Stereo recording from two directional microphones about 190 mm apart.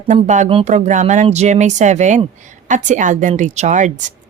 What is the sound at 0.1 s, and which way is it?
A woman's voice, 40° right (ahead or behind).